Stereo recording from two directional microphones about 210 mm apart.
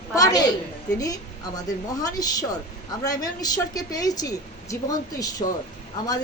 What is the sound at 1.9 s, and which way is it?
A woman's voice, 15° left (ahead or behind).